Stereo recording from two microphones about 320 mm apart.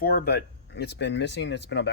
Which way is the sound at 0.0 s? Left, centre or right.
Left.